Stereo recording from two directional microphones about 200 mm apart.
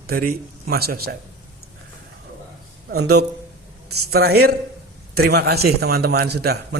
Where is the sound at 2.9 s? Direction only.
55° right (ahead or behind).